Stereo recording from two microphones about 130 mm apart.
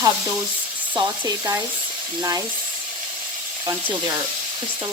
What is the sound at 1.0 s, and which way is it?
Speech, 25° right (ahead or behind).